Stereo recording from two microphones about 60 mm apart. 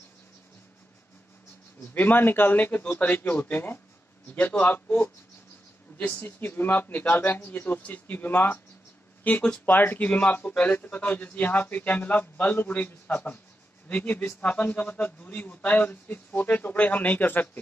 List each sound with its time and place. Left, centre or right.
2.0 s speech: left
5.9 s speech: left
9.2 s a man's voice: left
9.7 s a man's voice: left